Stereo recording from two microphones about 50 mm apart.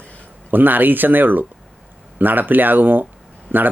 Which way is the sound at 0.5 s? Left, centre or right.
Right.